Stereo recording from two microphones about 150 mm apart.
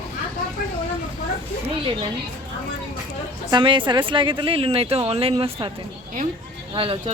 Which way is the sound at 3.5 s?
35° right (ahead or behind).